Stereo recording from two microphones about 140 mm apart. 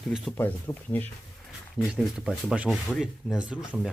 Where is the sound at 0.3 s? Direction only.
15° left (ahead or behind).